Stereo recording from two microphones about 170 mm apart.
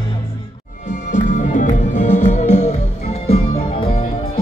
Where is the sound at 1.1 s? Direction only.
50° left (ahead or behind).